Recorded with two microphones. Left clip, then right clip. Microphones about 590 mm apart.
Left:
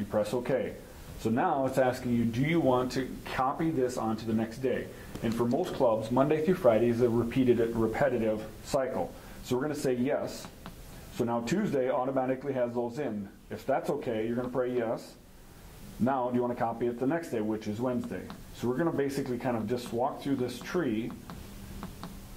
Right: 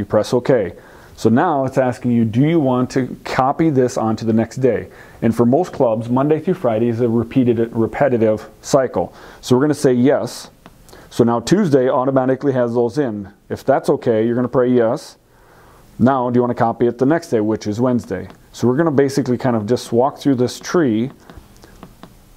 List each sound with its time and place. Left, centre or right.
0.1 s speech: right
11.1 s speech: right
16.0 s speech: right